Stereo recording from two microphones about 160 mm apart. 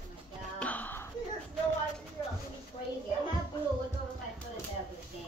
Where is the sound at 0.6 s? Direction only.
10° left (ahead or behind).